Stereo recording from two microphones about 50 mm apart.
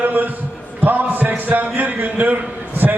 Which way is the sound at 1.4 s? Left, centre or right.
Right.